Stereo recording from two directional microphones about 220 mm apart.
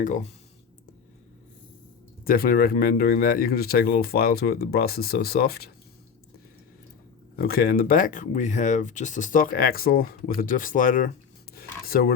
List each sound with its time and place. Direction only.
0.0 s speech: 35° left (ahead or behind)
2.2 s speech: 40° left (ahead or behind)
7.3 s speech: 40° left (ahead or behind)
11.5 s a sound: 45° left (ahead or behind)